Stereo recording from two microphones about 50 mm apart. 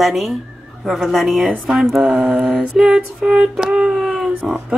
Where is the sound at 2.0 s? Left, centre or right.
Centre.